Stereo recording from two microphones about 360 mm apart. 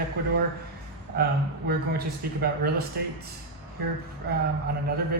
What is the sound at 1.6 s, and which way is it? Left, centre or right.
A man's voice, right.